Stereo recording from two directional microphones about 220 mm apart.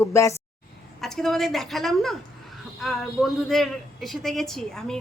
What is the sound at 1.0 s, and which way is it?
A man's voice, centre (ahead or behind).